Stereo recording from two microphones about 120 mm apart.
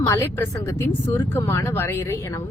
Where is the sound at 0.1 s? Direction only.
25° left (ahead or behind).